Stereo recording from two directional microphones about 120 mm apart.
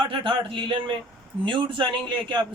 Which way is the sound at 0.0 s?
45° right (ahead or behind).